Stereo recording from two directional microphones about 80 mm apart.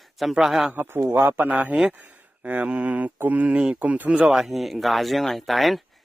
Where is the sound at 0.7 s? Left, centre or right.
Right.